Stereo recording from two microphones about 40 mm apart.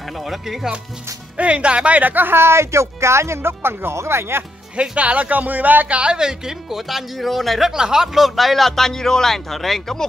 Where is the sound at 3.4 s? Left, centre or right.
Right.